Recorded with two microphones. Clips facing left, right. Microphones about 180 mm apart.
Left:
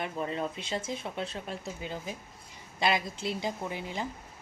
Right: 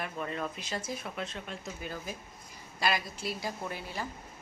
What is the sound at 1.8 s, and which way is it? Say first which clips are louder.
A woman's voice: left 2 dB; 20° left (ahead or behind).